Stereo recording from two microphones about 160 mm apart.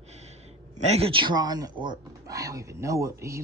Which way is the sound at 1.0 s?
35° right (ahead or behind).